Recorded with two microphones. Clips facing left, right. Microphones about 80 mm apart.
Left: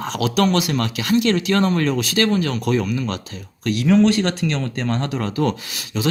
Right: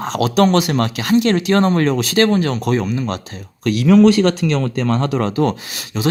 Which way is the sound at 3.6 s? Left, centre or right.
Right.